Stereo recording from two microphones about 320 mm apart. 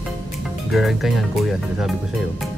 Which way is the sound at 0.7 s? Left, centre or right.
Centre.